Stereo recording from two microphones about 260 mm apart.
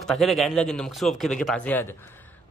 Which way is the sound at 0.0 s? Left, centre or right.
Centre.